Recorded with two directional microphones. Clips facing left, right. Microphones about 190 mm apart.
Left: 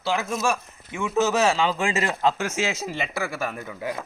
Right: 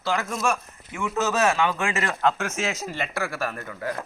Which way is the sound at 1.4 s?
25° left (ahead or behind).